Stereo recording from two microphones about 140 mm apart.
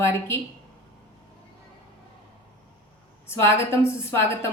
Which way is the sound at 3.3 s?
20° left (ahead or behind).